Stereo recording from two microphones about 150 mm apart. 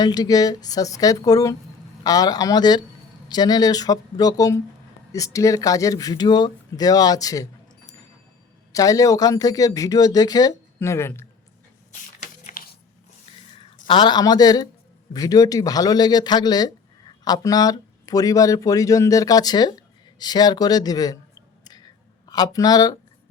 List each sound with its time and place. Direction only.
0.0 s speech: 25° left (ahead or behind)
8.7 s speech: 20° left (ahead or behind)
11.9 s biting: 55° left (ahead or behind)
13.6 s speech: 35° left (ahead or behind)